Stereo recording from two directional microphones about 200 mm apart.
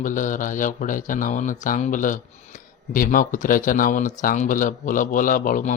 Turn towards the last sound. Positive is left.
turn(degrees=40)  # may be behind; listen again after turning